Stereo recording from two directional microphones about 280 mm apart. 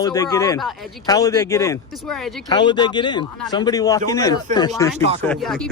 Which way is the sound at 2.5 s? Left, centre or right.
Centre.